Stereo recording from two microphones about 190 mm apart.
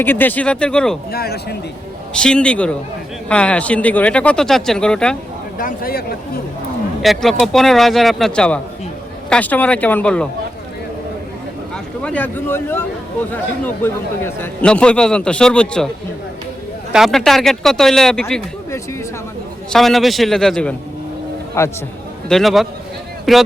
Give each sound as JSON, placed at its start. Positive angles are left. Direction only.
{"t": 0.0, "sound": "speech", "side_deg": 10}
{"t": 1.1, "sound": "speech", "side_deg": 55}
{"t": 2.1, "sound": "speech", "side_deg": 5}
{"t": 5.5, "sound": "speech", "side_deg": 50}
{"t": 7.0, "sound": "speech", "side_deg": 0}
{"t": 12.0, "sound": "speech", "side_deg": 10}
{"t": 16.9, "sound": "speech", "side_deg": 0}
{"t": 19.7, "sound": "speech", "side_deg": 0}
{"t": 21.6, "sound": "speech", "side_deg": 15}
{"t": 22.3, "sound": "speech", "side_deg": 0}